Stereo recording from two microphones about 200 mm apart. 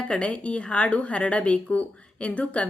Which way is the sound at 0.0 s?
5° left (ahead or behind).